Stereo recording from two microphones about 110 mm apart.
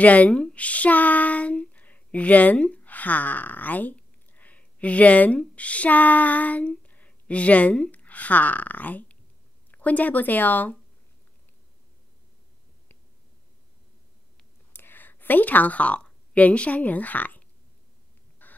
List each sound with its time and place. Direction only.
0.0 s speech: 15° left (ahead or behind)
14.7 s a woman's voice: 20° left (ahead or behind)
18.4 s chicken: 15° left (ahead or behind)